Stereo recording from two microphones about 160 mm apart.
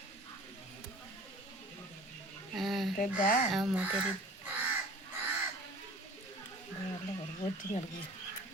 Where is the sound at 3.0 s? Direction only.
55° left (ahead or behind).